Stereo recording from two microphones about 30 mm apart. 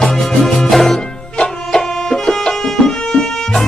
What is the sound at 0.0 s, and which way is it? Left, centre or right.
Music, centre.